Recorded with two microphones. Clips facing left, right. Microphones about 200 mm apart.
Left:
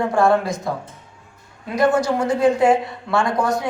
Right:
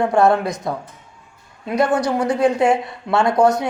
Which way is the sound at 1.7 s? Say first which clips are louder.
Even; 25° left (ahead or behind).